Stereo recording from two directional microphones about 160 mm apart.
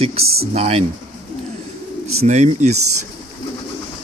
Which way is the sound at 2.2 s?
45° right (ahead or behind).